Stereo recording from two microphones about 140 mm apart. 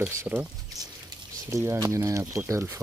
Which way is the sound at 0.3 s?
15° right (ahead or behind).